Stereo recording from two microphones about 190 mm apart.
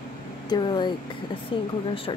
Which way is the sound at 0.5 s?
25° left (ahead or behind).